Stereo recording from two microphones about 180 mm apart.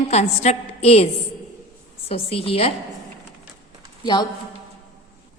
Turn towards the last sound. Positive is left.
turn(degrees=25)  # may be behind; listen again after turning